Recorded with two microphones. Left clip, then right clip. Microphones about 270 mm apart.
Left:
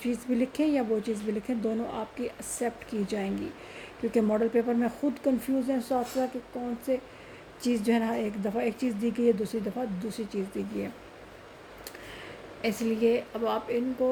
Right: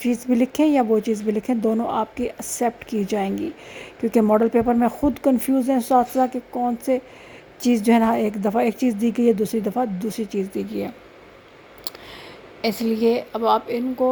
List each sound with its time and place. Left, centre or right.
0.0 s speech: right
12.8 s speech: centre